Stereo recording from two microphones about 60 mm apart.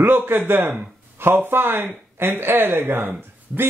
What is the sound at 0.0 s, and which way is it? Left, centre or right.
Speech, right.